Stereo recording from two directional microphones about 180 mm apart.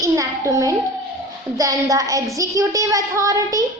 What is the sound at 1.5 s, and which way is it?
Child singing, 20° right (ahead or behind).